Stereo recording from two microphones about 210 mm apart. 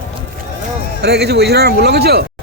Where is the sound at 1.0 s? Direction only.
50° right (ahead or behind).